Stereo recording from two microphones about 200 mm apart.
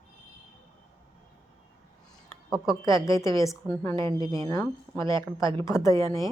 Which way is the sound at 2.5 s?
Centre (ahead or behind).